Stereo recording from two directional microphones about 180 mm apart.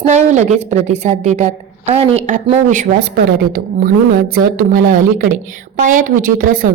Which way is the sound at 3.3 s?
55° right (ahead or behind).